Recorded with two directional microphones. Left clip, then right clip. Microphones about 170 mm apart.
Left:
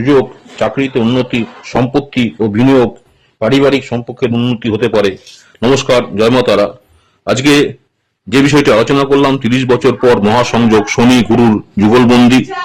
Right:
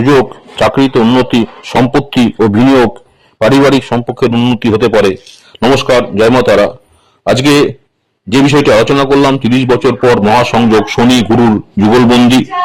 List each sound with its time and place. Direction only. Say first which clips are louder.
0.0 s a man's voice: right 2 dB; 30° right (ahead or behind); by 12.3 s centre (ahead or behind)